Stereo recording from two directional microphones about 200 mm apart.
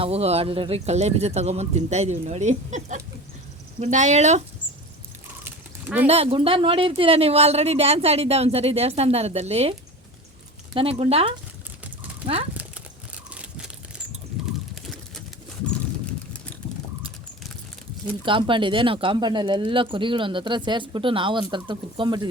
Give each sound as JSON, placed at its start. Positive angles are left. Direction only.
{"t": 0.0, "sound": "speech", "side_deg": -30}
{"t": 6.1, "sound": "speech", "side_deg": -30}
{"t": 10.8, "sound": "speech", "side_deg": -30}
{"t": 13.3, "sound": "a sound", "side_deg": -5}
{"t": 18.3, "sound": "speech", "side_deg": -25}